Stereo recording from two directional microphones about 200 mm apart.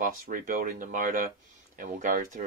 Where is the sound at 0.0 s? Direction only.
45° right (ahead or behind).